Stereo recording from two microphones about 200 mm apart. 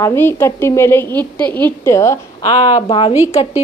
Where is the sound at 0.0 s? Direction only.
10° left (ahead or behind).